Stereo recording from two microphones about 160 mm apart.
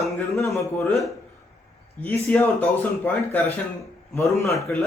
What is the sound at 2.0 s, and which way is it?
Speech, 15° left (ahead or behind).